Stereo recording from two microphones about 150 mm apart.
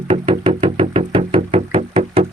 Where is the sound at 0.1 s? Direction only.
35° right (ahead or behind).